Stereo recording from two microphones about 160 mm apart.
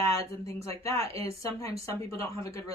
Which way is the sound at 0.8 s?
20° left (ahead or behind).